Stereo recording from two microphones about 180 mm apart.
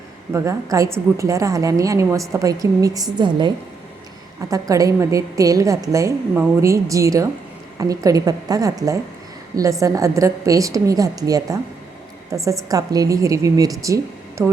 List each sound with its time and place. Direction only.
0.3 s a woman's voice: 15° right (ahead or behind)